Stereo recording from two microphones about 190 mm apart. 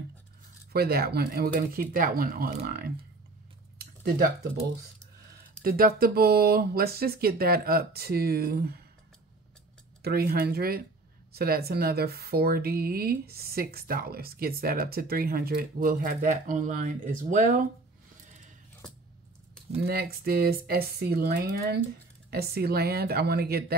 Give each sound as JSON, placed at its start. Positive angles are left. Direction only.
{"t": 0.7, "sound": "speech", "side_deg": -50}
{"t": 3.7, "sound": "a sound", "side_deg": -55}
{"t": 5.6, "sound": "speech", "side_deg": -50}
{"t": 10.0, "sound": "speech", "side_deg": -55}
{"t": 19.9, "sound": "speech", "side_deg": -55}